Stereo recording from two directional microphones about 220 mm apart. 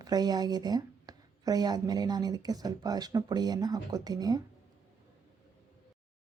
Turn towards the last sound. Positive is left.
turn(degrees=-15)  # may be behind; listen again after turning